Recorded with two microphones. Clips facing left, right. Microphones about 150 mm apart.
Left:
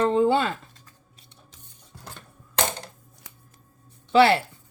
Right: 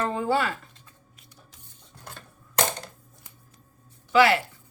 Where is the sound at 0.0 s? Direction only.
25° left (ahead or behind).